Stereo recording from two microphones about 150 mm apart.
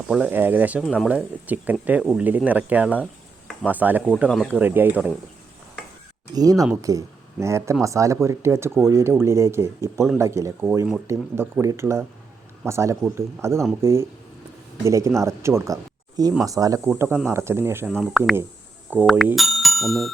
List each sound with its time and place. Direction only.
0.1 s speech: 10° right (ahead or behind)
0.8 s speech: centre (ahead or behind)
1.0 s speech: 10° right (ahead or behind)
6.3 s speech: 25° right (ahead or behind)
17.9 s speech: centre (ahead or behind)
18.9 s speech: 10° right (ahead or behind)
19.4 s bicycle bell: centre (ahead or behind)